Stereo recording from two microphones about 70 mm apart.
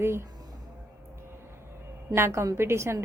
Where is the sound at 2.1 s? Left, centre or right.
Right.